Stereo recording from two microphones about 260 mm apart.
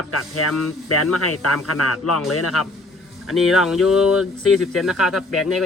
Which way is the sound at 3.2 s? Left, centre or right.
Centre.